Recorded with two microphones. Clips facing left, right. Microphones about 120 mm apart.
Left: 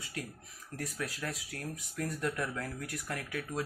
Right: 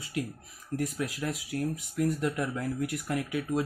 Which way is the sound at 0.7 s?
20° right (ahead or behind).